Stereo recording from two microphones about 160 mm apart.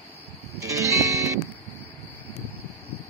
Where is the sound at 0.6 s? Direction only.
20° right (ahead or behind).